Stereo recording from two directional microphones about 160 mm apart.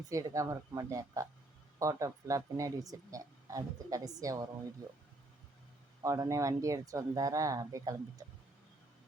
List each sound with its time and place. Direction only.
0.1 s speech: 20° right (ahead or behind)
6.0 s speech: 20° right (ahead or behind)